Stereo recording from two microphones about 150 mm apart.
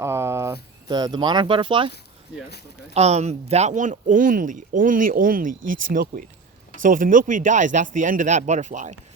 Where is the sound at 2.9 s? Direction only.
45° right (ahead or behind).